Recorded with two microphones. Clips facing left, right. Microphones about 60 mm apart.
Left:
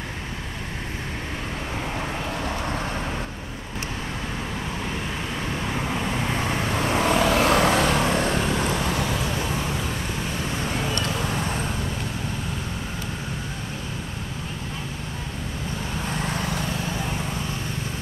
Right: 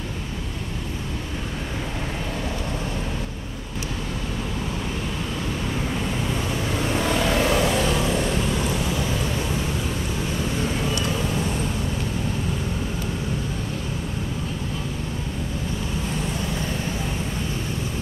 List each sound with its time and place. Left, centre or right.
6.3 s vehicle: left
16.3 s vehicle: left